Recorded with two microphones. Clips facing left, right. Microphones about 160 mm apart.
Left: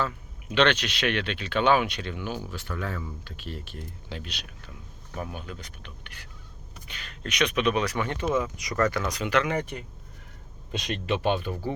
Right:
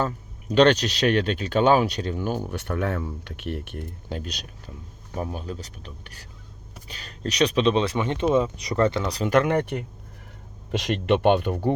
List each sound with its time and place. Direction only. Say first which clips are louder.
0.0 s speech: right 3 dB; 40° right (ahead or behind)
9.3 s speech: right 6 dB; 55° right (ahead or behind)